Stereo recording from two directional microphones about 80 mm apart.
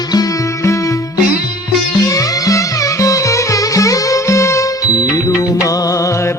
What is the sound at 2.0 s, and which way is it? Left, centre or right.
Music, left.